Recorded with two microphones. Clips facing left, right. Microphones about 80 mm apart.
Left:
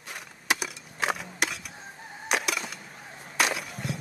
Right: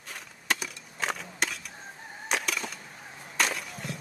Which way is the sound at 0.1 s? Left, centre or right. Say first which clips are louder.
Left 2 dB; centre.